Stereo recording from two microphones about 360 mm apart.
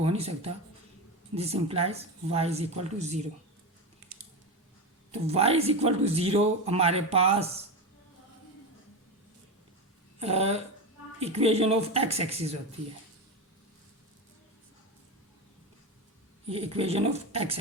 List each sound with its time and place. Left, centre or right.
0.0 s speech: centre
5.2 s speech: centre
10.2 s speech: centre
16.5 s speech: centre